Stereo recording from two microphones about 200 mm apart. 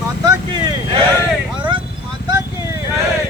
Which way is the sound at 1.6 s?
25° right (ahead or behind).